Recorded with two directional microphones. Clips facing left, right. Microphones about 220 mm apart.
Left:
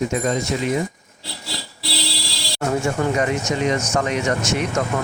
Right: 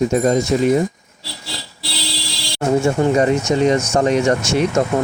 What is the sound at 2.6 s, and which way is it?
Speech, 25° right (ahead or behind).